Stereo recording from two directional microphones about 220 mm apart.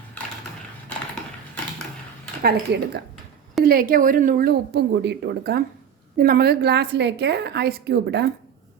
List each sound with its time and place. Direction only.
2.4 s a woman's voice: 50° right (ahead or behind)